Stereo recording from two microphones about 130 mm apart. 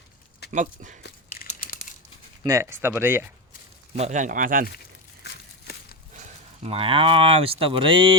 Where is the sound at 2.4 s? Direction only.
20° right (ahead or behind).